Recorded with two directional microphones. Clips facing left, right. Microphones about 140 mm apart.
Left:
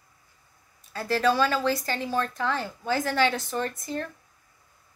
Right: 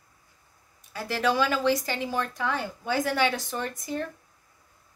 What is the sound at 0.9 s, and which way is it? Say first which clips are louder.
A woman's voice: left 2 dB; 15° right (ahead or behind).